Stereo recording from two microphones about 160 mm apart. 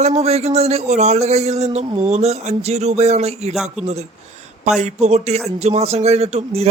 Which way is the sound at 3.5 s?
Centre (ahead or behind).